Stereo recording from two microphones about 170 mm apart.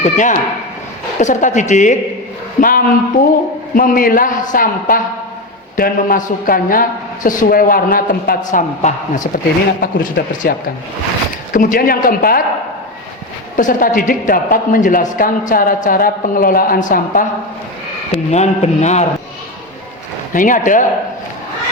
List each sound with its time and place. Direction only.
0.0 s a man's voice: 50° left (ahead or behind)
11.5 s a woman's voice: 55° left (ahead or behind)
13.6 s a man's voice: 50° left (ahead or behind)
18.3 s a man's voice: 40° left (ahead or behind)
20.3 s a man's voice: 50° left (ahead or behind)